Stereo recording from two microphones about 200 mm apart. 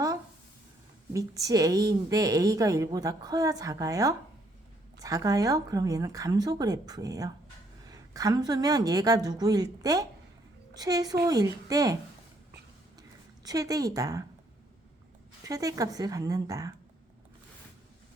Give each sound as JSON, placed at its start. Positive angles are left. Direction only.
{"t": 1.1, "sound": "a woman's voice", "side_deg": -15}
{"t": 13.0, "sound": "speech", "side_deg": -20}
{"t": 15.4, "sound": "a woman's voice", "side_deg": -15}